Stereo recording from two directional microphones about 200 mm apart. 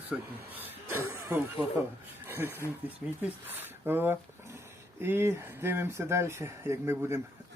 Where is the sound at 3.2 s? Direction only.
10° right (ahead or behind).